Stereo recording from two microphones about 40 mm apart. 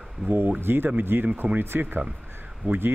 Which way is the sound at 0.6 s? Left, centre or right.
Right.